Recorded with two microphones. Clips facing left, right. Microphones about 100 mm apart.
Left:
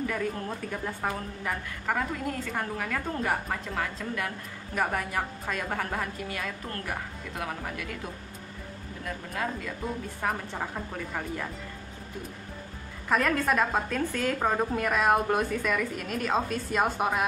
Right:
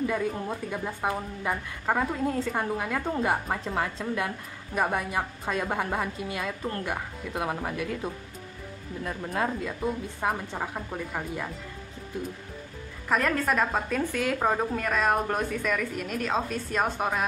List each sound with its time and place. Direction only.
0.1 s a woman's voice: 15° right (ahead or behind); by 2.6 s 30° right (ahead or behind)
2.8 s a woman's voice: 20° right (ahead or behind)
3.4 s a woman's voice: 30° right (ahead or behind)
10.2 s a woman's voice: 15° right (ahead or behind)
13.1 s a woman's voice: centre (ahead or behind)